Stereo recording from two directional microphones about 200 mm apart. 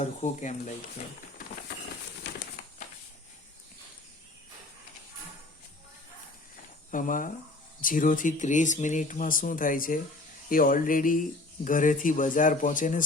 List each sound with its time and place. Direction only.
0.0 s speech: 35° left (ahead or behind)
6.9 s speech: 40° left (ahead or behind)